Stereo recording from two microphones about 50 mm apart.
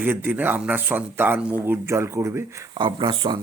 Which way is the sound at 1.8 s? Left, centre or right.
Right.